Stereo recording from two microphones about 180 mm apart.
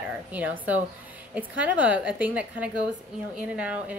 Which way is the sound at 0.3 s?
10° right (ahead or behind).